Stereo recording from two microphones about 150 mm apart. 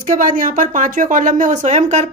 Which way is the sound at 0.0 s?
60° right (ahead or behind).